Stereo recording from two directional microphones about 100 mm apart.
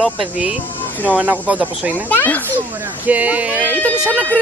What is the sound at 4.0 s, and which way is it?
Speech, 15° right (ahead or behind).